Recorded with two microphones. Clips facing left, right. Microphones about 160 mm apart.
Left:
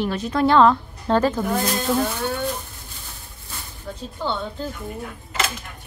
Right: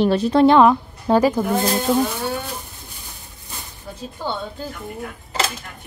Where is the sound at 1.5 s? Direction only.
20° right (ahead or behind).